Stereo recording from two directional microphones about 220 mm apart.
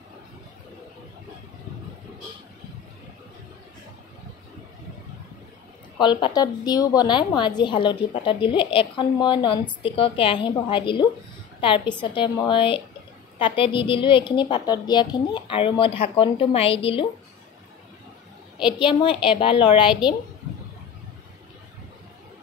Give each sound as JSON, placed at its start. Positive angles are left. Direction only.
{"t": 5.9, "sound": "a woman's voice", "side_deg": 20}
{"t": 18.8, "sound": "a woman's voice", "side_deg": 20}